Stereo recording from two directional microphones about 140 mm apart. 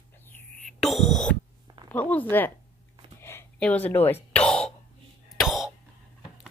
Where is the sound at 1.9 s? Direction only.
10° left (ahead or behind).